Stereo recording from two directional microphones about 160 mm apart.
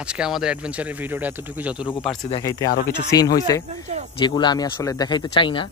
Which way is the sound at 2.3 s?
25° left (ahead or behind).